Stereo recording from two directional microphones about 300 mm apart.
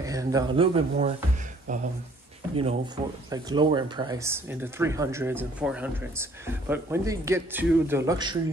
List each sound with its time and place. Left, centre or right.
0.0 s a man's voice: centre